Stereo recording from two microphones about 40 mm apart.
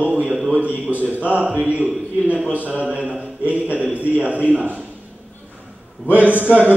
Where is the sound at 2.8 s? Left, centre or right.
Right.